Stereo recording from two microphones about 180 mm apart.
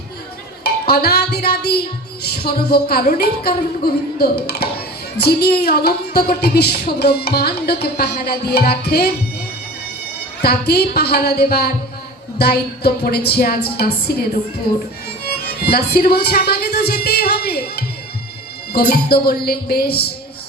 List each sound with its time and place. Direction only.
0.6 s music: 60° left (ahead or behind)
2.2 s speech: 60° left (ahead or behind)
10.4 s speech: 60° left (ahead or behind)
15.2 s music: 60° left (ahead or behind)
18.7 s speech: 60° left (ahead or behind)